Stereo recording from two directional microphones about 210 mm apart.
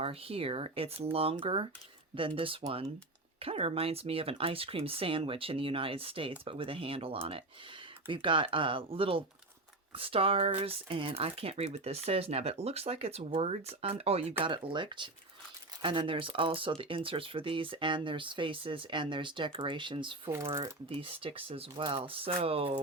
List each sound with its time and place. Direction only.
0.0 s speech: 25° right (ahead or behind)